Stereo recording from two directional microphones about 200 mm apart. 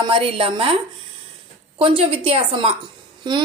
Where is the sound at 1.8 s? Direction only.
25° right (ahead or behind).